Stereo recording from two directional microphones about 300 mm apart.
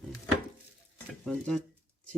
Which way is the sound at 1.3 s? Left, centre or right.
Centre.